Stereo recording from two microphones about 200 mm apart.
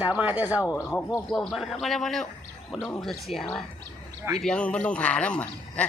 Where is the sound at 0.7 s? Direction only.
15° left (ahead or behind).